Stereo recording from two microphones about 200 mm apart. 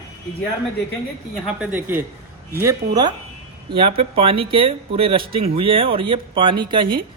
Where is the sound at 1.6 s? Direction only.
10° right (ahead or behind).